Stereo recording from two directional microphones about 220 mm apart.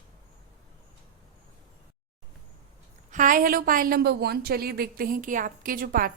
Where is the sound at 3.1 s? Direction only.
35° right (ahead or behind).